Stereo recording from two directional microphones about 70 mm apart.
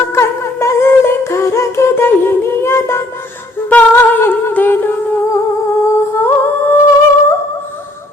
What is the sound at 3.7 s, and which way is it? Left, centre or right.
Humming, left.